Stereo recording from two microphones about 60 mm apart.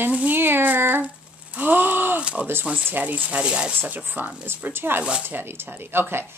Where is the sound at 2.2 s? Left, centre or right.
Centre.